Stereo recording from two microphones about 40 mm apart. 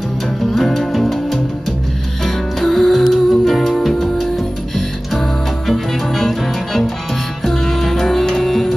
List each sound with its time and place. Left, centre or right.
0.5 s music: centre